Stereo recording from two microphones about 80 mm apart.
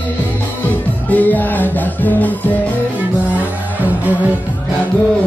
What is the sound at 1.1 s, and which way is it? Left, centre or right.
Music, left.